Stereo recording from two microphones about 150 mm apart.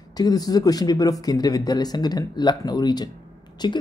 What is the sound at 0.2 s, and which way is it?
Speech, 25° left (ahead or behind).